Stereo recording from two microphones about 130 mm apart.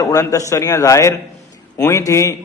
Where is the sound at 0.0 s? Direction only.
25° left (ahead or behind).